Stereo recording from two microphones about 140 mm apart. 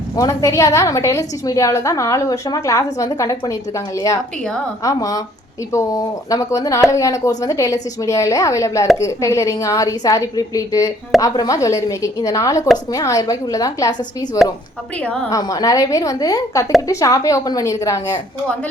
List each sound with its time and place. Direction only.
0.2 s a woman's voice: 25° left (ahead or behind)
15.3 s a woman's voice: 25° left (ahead or behind)